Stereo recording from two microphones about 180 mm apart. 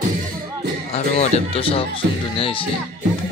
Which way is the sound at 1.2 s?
35° left (ahead or behind).